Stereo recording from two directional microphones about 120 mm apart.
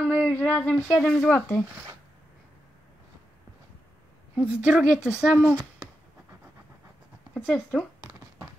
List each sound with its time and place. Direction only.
0.0 s a sound: 10° left (ahead or behind)
1.0 s speech: 10° left (ahead or behind)
4.4 s a woman's voice: 10° right (ahead or behind)
5.1 s speech: 15° left (ahead or behind)
7.3 s speech: 15° left (ahead or behind)